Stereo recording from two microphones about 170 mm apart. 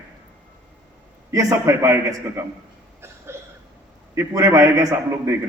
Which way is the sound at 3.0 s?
15° right (ahead or behind).